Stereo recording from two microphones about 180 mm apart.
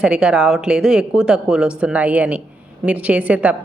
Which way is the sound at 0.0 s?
5° right (ahead or behind).